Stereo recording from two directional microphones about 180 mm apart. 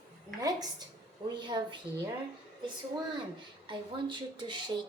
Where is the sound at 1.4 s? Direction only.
25° right (ahead or behind).